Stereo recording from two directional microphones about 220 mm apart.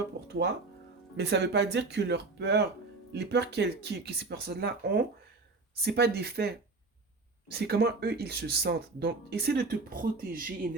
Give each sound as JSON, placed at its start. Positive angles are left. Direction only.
{"t": 1.1, "sound": "speech", "side_deg": -50}